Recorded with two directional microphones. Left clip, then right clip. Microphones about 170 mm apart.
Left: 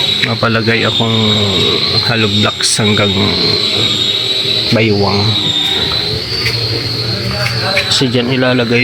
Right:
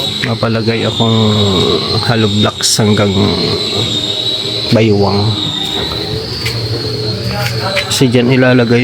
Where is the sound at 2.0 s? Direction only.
20° right (ahead or behind).